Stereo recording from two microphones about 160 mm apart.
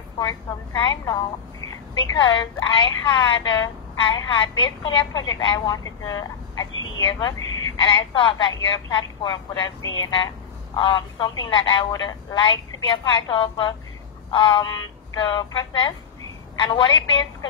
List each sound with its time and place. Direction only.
0.8 s a woman's voice: 20° left (ahead or behind)